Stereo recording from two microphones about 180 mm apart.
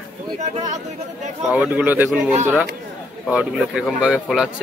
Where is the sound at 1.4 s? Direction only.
10° right (ahead or behind).